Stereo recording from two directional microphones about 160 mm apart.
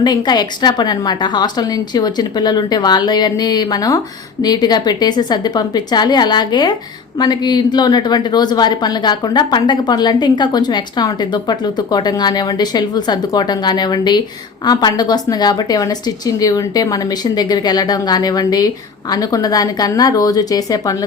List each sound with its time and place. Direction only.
0.0 s a woman's voice: 25° left (ahead or behind)